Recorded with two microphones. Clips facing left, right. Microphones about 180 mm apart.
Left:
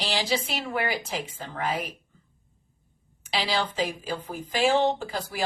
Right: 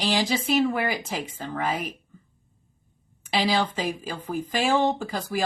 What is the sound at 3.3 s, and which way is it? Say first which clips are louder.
A woman's voice: right 4 dB; 50° right (ahead or behind).